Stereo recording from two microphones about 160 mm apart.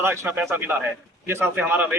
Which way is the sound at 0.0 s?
15° right (ahead or behind).